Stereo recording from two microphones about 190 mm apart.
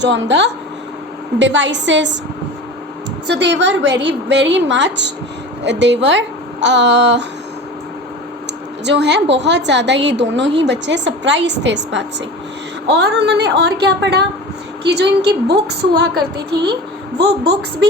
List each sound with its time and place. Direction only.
0.0 s a woman's voice: 65° right (ahead or behind)
3.2 s a woman's voice: 65° right (ahead or behind)
8.8 s a woman's voice: 65° right (ahead or behind)